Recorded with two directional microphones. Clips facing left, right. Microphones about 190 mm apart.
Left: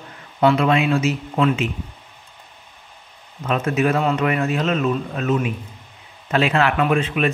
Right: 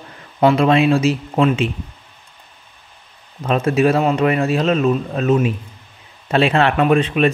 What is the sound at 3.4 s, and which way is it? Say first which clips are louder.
Speech: right 4 dB; 30° right (ahead or behind).